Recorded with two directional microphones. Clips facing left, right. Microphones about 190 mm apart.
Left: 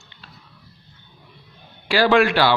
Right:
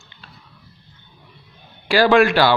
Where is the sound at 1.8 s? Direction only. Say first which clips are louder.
Right 2 dB; 45° right (ahead or behind).